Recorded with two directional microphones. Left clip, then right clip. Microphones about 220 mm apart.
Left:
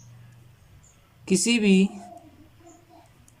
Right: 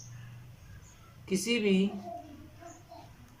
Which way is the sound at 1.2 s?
45° left (ahead or behind).